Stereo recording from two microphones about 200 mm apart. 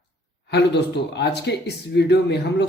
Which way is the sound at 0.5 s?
55° left (ahead or behind).